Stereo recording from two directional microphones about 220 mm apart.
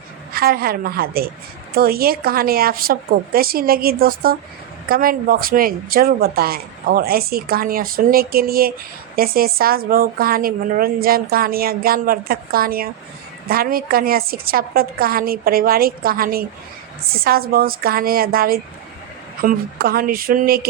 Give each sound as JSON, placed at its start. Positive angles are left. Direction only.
{"t": 0.3, "sound": "speech", "side_deg": -45}